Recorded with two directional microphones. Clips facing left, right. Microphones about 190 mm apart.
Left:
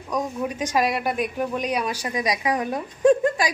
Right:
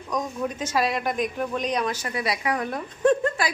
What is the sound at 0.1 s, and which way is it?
Speech, 10° left (ahead or behind).